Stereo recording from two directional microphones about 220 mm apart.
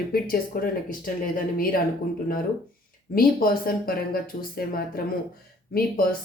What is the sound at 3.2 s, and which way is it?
Speech, 40° left (ahead or behind).